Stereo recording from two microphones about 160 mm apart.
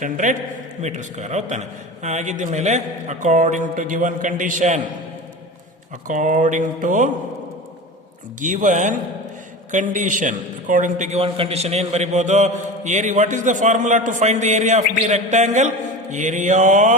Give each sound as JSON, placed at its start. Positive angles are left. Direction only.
{"t": 0.0, "sound": "a man's voice", "side_deg": -50}
{"t": 6.1, "sound": "a man's voice", "side_deg": -55}
{"t": 8.4, "sound": "a man's voice", "side_deg": -55}